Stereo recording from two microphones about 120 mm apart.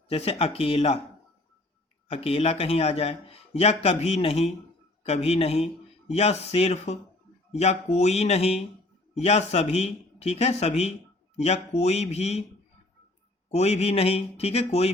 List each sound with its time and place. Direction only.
0.1 s speech: 55° left (ahead or behind)
2.0 s speech: 55° left (ahead or behind)
13.5 s speech: 60° left (ahead or behind)